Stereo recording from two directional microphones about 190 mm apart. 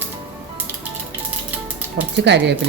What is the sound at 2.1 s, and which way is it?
Speech, 65° right (ahead or behind).